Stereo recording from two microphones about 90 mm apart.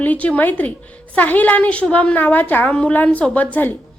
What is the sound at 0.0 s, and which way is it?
A woman's voice, 15° left (ahead or behind).